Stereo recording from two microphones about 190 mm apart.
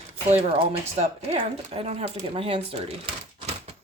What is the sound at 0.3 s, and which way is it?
Speech, 30° right (ahead or behind).